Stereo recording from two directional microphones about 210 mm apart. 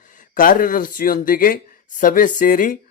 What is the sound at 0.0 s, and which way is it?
A man's voice, 40° left (ahead or behind).